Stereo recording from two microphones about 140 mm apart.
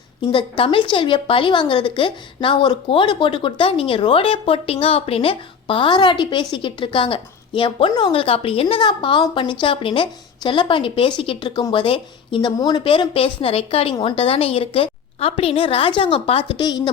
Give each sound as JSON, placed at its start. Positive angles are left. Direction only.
{"t": 0.3, "sound": "a woman's voice", "side_deg": 40}
{"t": 16.5, "sound": "a woman's voice", "side_deg": 30}